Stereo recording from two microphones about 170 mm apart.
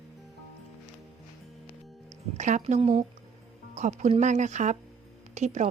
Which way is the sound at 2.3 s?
45° right (ahead or behind).